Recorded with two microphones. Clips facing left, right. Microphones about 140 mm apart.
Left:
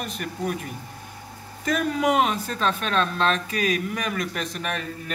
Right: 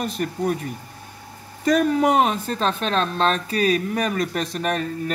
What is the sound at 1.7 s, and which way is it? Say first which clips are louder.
Speech: right 5 dB; 35° right (ahead or behind).